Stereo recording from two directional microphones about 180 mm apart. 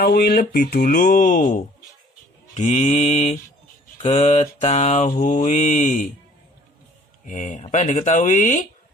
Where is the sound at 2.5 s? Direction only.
40° left (ahead or behind).